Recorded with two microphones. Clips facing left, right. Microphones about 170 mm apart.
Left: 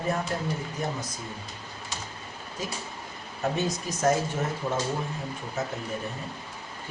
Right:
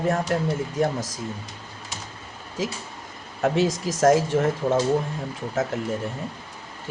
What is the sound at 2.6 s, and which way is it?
Speech, 90° right.